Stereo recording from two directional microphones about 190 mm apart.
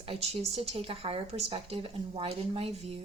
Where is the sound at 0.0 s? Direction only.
30° right (ahead or behind).